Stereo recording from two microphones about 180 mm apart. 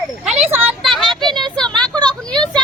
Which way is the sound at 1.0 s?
25° right (ahead or behind).